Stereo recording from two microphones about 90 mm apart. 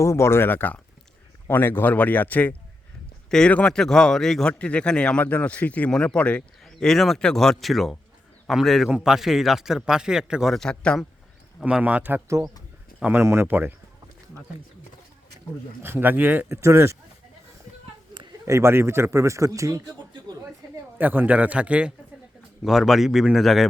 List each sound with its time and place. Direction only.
0.0 s a man's voice: 30° left (ahead or behind); by 10.5 s 10° right (ahead or behind)
10.5 s a man's voice: 5° left (ahead or behind)
11.6 s a man's voice: 15° right (ahead or behind)
13.2 s speech: 25° right (ahead or behind)
15.8 s speech: 25° right (ahead or behind)
18.4 s a man's voice: 30° right (ahead or behind)
21.0 s a man's voice: 20° right (ahead or behind); by 23.6 s centre (ahead or behind)